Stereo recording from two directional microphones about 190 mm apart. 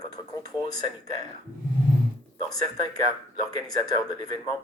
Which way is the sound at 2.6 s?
20° left (ahead or behind).